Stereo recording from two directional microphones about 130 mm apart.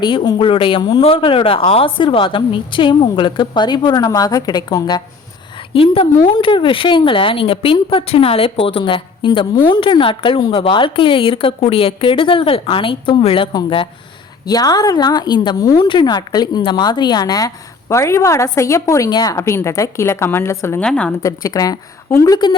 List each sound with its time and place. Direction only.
0.0 s speech: 35° left (ahead or behind)
5.5 s a woman's voice: 45° left (ahead or behind); by 20.8 s 20° left (ahead or behind)
20.8 s a woman's voice: 5° left (ahead or behind)
21.1 s a woman's voice: 25° left (ahead or behind)